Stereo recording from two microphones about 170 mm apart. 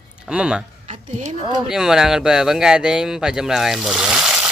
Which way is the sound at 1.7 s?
Centre (ahead or behind).